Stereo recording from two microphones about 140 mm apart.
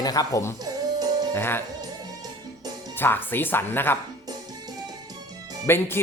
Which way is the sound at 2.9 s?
15° left (ahead or behind).